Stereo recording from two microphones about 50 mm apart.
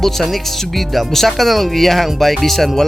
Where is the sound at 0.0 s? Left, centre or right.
Centre.